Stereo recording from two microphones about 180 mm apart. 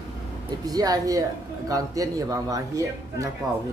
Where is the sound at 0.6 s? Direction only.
20° right (ahead or behind).